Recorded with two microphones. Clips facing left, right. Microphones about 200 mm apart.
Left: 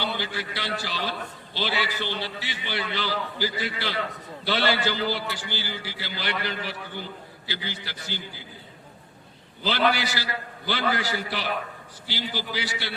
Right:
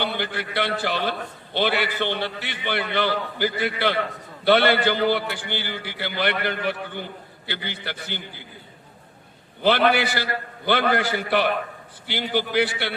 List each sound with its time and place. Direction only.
0.0 s a man's voice: 60° right (ahead or behind)
9.6 s a man's voice: 60° right (ahead or behind)